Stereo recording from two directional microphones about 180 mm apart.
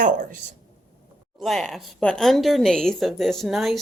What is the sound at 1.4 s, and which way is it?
A woman's voice, centre (ahead or behind).